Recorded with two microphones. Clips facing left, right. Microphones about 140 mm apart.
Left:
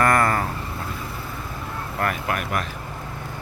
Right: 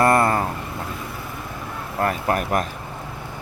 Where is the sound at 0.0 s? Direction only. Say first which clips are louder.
Right 2 dB; 25° right (ahead or behind).